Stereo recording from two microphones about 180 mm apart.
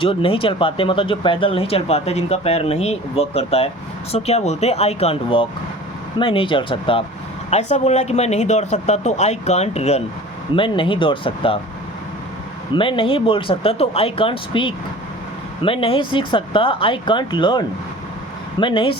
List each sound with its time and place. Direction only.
0.0 s speech: 30° left (ahead or behind)
12.7 s speech: 30° left (ahead or behind)